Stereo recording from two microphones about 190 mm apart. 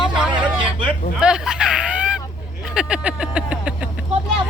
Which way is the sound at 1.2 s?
5° right (ahead or behind).